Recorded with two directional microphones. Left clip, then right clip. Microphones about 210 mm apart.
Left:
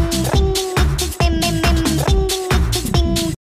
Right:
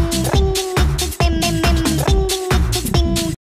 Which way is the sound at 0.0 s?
Centre (ahead or behind).